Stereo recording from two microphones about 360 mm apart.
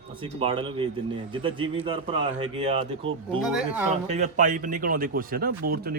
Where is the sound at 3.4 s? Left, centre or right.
Centre.